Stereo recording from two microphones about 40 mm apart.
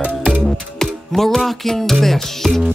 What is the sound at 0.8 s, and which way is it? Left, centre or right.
Music, centre.